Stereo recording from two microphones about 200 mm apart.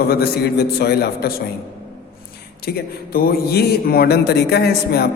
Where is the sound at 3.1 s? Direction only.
50° left (ahead or behind).